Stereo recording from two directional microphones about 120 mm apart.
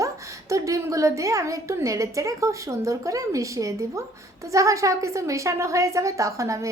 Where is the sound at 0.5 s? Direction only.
25° right (ahead or behind).